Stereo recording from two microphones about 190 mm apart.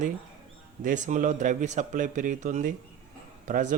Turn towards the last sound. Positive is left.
turn(degrees=-45)  # may be behind; listen again after turning